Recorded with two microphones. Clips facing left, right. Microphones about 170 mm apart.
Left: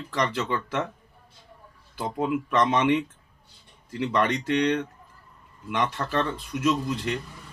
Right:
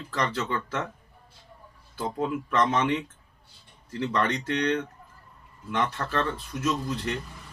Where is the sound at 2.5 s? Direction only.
15° left (ahead or behind).